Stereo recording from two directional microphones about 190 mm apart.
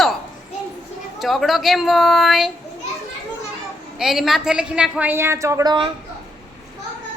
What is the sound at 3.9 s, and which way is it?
A woman's voice, centre (ahead or behind).